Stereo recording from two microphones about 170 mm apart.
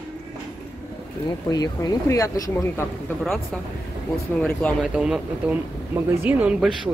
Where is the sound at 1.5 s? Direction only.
20° left (ahead or behind).